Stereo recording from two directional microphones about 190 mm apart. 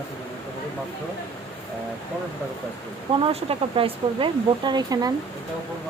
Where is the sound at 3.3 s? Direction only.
30° right (ahead or behind).